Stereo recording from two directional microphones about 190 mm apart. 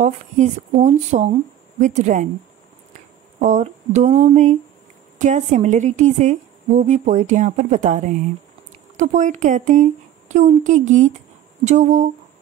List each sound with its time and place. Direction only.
0.0 s a woman's voice: 40° right (ahead or behind)
3.3 s a woman's voice: 40° right (ahead or behind)